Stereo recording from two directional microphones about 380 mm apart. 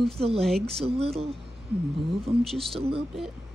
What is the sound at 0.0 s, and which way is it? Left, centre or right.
Speech, centre.